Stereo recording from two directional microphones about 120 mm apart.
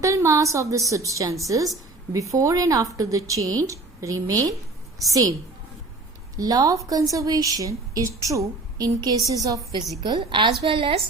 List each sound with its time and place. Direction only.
0.0 s a woman's voice: 25° right (ahead or behind)
6.3 s a woman's voice: 30° right (ahead or behind)
10.0 s a woman's voice: 40° right (ahead or behind)